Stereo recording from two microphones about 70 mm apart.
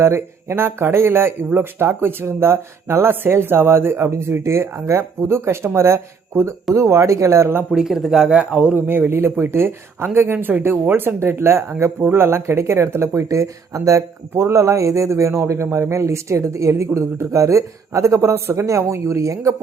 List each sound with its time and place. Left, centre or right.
0.0 s speech: right
7.7 s speech: centre
8.9 s a man's voice: right